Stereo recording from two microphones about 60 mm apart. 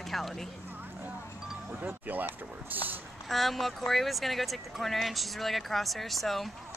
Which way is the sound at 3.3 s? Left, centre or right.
Centre.